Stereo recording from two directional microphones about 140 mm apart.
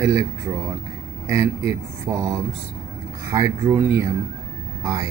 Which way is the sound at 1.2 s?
20° right (ahead or behind).